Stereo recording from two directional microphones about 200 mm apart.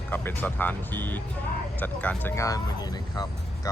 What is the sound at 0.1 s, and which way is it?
Speech, 10° left (ahead or behind).